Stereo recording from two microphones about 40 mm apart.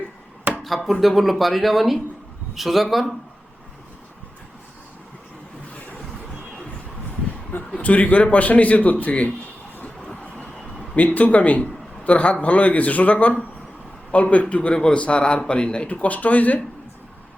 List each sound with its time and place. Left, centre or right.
0.5 s chop: right
0.9 s speech: centre
7.8 s a man's voice: left
10.9 s a man's voice: left
15.9 s a man's voice: left